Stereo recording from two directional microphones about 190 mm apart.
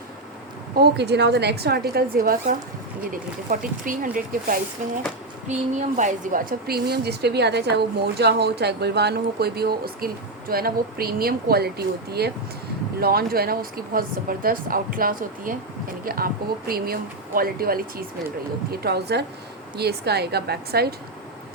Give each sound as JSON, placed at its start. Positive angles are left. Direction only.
{"t": 0.8, "sound": "a woman's voice", "side_deg": -60}